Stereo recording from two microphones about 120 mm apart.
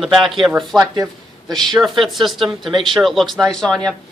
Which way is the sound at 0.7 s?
30° right (ahead or behind).